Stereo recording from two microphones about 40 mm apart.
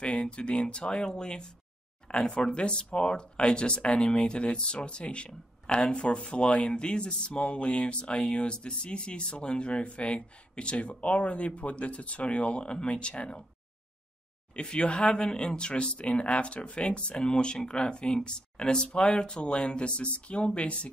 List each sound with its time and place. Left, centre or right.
0.0 s speech: left
14.5 s speech: left